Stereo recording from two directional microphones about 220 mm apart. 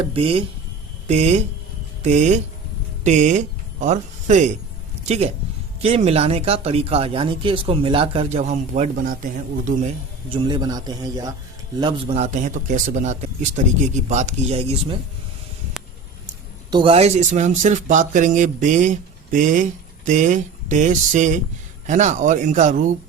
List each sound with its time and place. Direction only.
0.0 s speech: 25° right (ahead or behind)
10.2 s a man's voice: 25° right (ahead or behind)
16.7 s speech: 25° right (ahead or behind)